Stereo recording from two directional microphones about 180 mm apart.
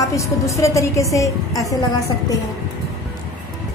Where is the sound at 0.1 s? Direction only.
15° left (ahead or behind).